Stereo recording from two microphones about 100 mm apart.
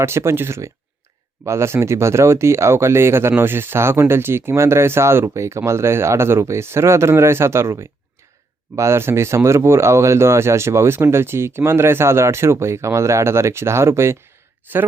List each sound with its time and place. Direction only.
0.0 s speech: 25° right (ahead or behind)